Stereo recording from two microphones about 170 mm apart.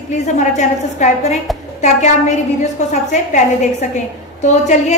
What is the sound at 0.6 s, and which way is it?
A woman's voice, 45° left (ahead or behind).